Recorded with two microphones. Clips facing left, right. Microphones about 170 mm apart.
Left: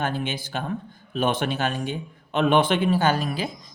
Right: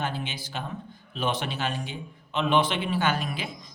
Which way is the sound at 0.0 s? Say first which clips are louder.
Left 5 dB; 50° left (ahead or behind).